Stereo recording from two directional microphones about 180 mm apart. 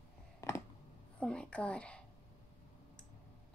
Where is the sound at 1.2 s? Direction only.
5° left (ahead or behind).